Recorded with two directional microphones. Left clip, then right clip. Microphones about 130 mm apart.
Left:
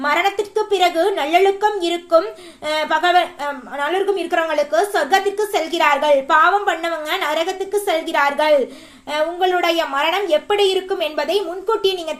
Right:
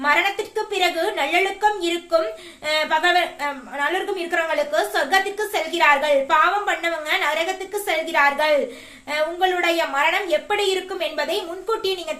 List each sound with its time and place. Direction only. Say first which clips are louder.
0.0 s a woman's voice: left 2 dB; 30° left (ahead or behind)